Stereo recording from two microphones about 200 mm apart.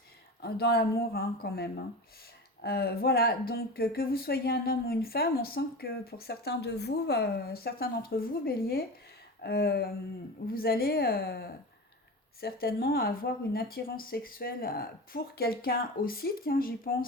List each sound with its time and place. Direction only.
0.4 s speech: 50° left (ahead or behind)